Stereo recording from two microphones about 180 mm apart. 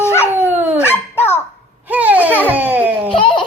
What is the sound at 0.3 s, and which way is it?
Dog, 10° right (ahead or behind).